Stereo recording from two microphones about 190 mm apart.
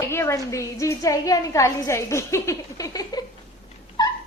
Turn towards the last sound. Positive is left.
turn(degrees=20)  # may be behind; listen again after turning